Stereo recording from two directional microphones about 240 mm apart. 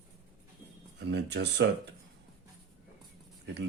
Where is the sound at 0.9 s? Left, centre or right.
Right.